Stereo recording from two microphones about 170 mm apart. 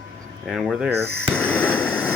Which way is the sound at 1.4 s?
10° left (ahead or behind).